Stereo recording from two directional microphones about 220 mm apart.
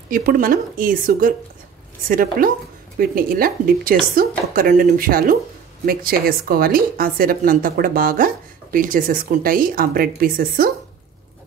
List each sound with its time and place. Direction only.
0.1 s a woman's voice: 40° right (ahead or behind)